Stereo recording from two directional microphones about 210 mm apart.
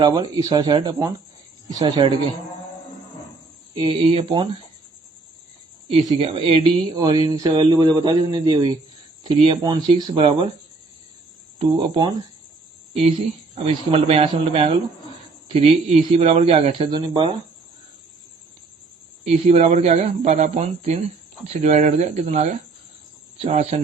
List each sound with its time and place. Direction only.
0.0 s speech: 20° right (ahead or behind)
3.8 s speech: 25° right (ahead or behind)
6.1 s speech: 25° right (ahead or behind)
11.6 s speech: 25° right (ahead or behind)
19.3 s speech: 30° right (ahead or behind)